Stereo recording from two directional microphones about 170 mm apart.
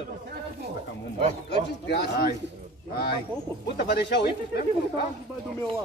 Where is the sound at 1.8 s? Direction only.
75° left (ahead or behind).